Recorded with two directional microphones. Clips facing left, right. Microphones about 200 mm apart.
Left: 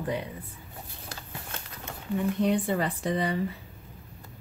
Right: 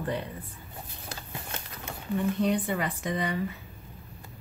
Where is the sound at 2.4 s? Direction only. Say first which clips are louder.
Left 2 dB; 30° left (ahead or behind).